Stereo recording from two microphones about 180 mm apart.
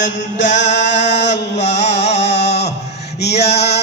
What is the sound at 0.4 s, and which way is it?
Speech, 40° left (ahead or behind).